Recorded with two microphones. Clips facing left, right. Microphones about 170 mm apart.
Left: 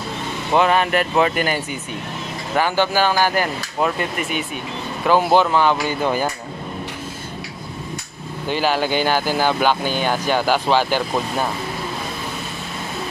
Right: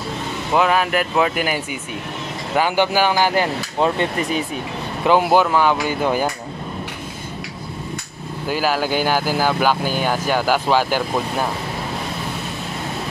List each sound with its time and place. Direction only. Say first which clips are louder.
0.5 s speech: left 1 dB; 5° right (ahead or behind)
3.8 s speech: right 2 dB; 30° right (ahead or behind)
5.0 s speech: even; 15° right (ahead or behind)
8.5 s speech: even; 5° right (ahead or behind)